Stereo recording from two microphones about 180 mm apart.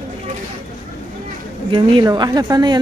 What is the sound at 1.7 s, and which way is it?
A woman's voice, 25° right (ahead or behind).